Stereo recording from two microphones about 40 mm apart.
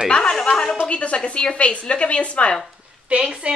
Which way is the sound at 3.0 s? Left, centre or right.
Right.